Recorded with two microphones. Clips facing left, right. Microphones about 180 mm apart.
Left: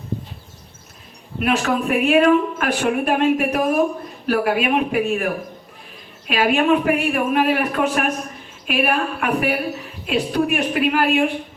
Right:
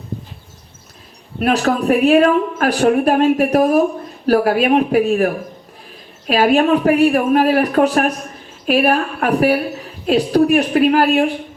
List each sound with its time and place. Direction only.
1.4 s a woman's voice: 40° right (ahead or behind)